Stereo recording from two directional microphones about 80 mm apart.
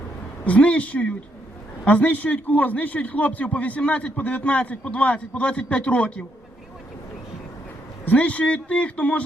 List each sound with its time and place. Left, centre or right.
0.4 s a man's voice: centre
8.0 s a man's voice: centre